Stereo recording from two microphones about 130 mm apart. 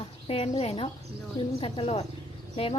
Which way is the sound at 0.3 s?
50° left (ahead or behind).